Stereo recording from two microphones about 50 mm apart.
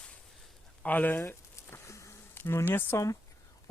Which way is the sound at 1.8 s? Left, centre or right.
Left.